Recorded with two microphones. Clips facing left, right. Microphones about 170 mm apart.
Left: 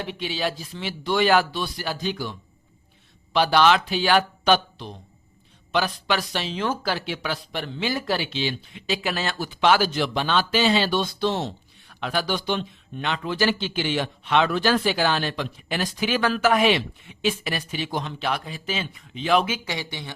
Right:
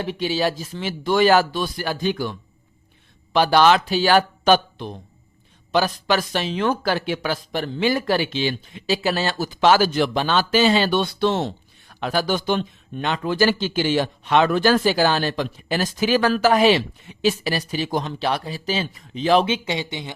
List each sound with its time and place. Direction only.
0.0 s speech: 40° right (ahead or behind)
3.3 s speech: 45° right (ahead or behind); by 11.5 s 65° right (ahead or behind)
11.9 s speech: 40° right (ahead or behind); by 20.1 s 20° right (ahead or behind)